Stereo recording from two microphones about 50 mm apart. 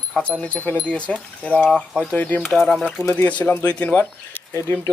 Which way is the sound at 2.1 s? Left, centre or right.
Left.